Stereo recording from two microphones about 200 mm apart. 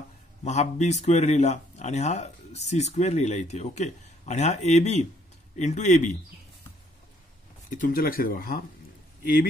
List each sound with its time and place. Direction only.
0.4 s speech: 35° left (ahead or behind)
7.7 s speech: 45° left (ahead or behind)